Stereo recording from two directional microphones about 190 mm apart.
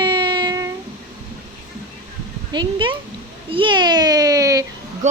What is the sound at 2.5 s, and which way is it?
Speech, 25° right (ahead or behind).